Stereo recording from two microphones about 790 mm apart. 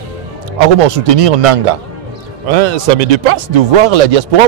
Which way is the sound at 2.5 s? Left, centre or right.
Right.